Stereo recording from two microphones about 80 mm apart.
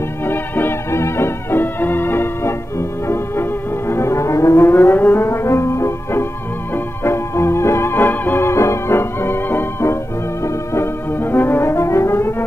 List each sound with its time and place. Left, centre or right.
0.3 s music: left
3.9 s music: left
7.1 s organ: left
11.3 s brass instrument: left